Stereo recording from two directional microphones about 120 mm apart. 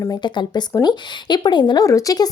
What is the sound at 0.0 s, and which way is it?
Speech, 35° left (ahead or behind).